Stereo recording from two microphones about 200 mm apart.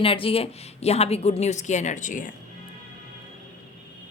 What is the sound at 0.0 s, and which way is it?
Speech, 25° left (ahead or behind).